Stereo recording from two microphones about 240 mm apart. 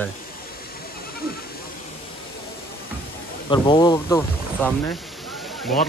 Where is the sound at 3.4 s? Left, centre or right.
Centre.